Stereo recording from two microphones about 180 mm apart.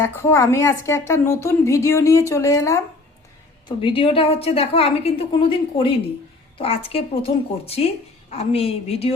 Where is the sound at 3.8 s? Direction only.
30° left (ahead or behind).